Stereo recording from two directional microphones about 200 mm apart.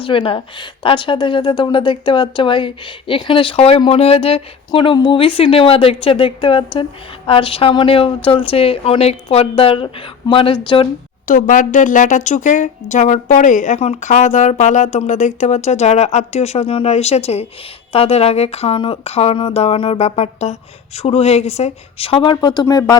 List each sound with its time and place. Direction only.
0.0 s speech: 25° left (ahead or behind)
11.3 s speech: 40° left (ahead or behind); by 23.0 s 15° left (ahead or behind)